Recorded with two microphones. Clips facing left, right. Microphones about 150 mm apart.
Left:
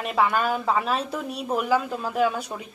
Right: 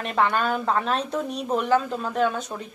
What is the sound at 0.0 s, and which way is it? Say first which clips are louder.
Speech: even; 5° left (ahead or behind).